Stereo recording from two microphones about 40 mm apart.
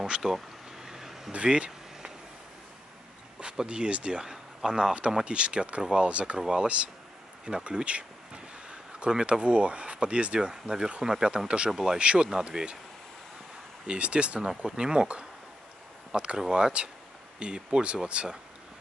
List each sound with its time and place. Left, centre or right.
0.8 s a sound: centre
1.3 s a sound: right
3.6 s speech: right
5.2 s speech: right
6.0 s speech: right
6.3 s speech: centre
11.7 s speech: centre
12.0 s speech: right
13.8 s speech: right
14.4 s speech: centre